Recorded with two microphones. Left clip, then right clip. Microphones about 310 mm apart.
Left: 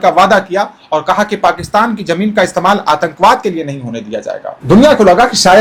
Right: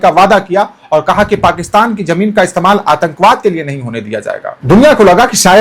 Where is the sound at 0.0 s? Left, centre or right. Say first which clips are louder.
Right 1 dB; right.